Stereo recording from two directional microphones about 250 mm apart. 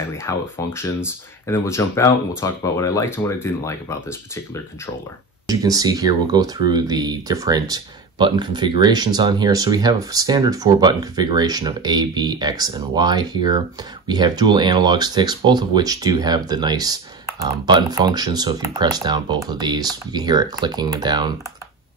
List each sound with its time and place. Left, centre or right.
0.1 s speech: centre
5.5 s speech: centre